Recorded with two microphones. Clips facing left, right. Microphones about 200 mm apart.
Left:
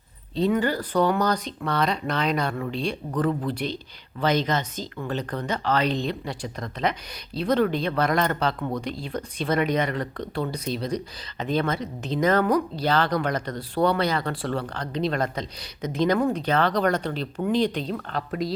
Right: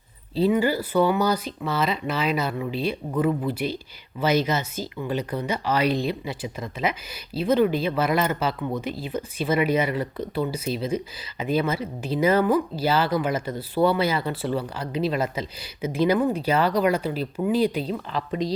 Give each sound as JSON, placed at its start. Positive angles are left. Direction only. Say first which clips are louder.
{"t": 0.3, "sound": "speech", "louder": "right 2 dB", "side_deg": -5}